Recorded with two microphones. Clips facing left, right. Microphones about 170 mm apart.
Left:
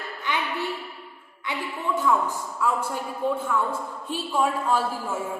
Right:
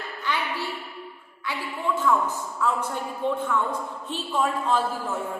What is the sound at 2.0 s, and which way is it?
A woman's voice, 10° left (ahead or behind).